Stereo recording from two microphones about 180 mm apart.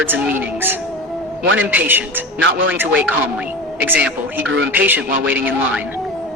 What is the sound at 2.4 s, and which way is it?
Speech, 90° right.